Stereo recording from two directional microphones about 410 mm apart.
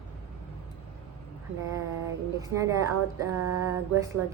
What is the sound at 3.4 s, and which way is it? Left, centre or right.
Mantra, right.